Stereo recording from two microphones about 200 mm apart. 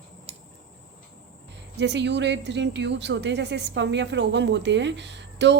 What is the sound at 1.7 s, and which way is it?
Speech, 60° right (ahead or behind).